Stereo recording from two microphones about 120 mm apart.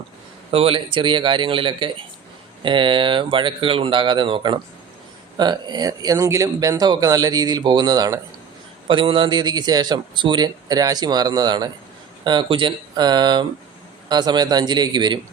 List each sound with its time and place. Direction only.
0.5 s speech: 50° right (ahead or behind); by 8.2 s 30° right (ahead or behind)
8.9 s speech: 45° right (ahead or behind)